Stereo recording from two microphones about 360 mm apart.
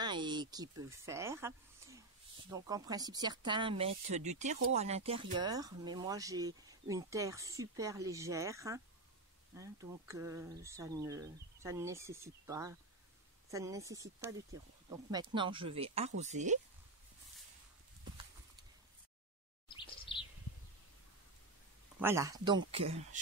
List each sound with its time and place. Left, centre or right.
0.0 s speech: centre
2.5 s speech: centre
19.7 s chirp: centre
22.0 s speech: centre